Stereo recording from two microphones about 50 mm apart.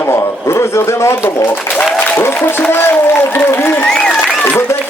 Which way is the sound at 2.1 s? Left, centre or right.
Left.